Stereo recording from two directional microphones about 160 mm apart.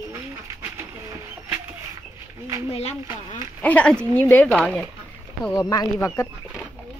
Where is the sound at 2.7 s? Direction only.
40° left (ahead or behind).